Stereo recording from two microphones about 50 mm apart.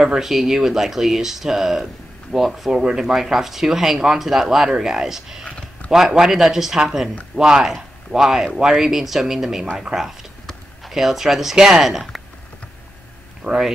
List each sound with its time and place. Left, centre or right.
0.0 s speech: centre
10.8 s speech: centre
13.4 s speech: right